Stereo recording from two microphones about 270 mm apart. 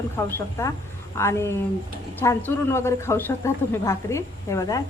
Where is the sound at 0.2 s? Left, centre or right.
Centre.